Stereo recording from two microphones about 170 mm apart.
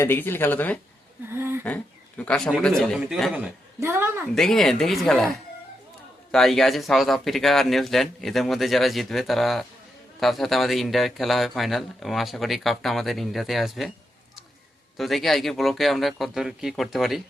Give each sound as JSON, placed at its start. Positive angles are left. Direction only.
{"t": 0.0, "sound": "speech", "side_deg": 15}
{"t": 1.3, "sound": "speech", "side_deg": -15}
{"t": 1.6, "sound": "speech", "side_deg": 10}
{"t": 3.3, "sound": "a woman's voice", "side_deg": -10}
{"t": 4.4, "sound": "speech", "side_deg": 0}
{"t": 6.3, "sound": "speech", "side_deg": 0}
{"t": 14.9, "sound": "speech", "side_deg": 0}